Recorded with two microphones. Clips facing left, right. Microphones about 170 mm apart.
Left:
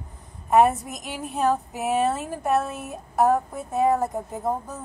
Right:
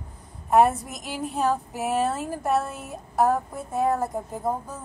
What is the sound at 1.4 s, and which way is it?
A woman's voice, centre (ahead or behind).